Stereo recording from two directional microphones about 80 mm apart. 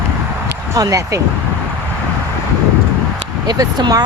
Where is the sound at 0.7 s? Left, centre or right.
Right.